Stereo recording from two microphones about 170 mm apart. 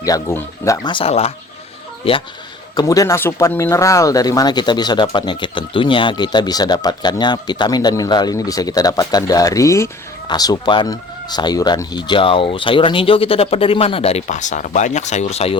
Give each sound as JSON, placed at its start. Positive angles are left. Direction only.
{"t": 0.0, "sound": "speech", "side_deg": 20}
{"t": 0.9, "sound": "speech", "side_deg": 35}
{"t": 2.7, "sound": "speech", "side_deg": 20}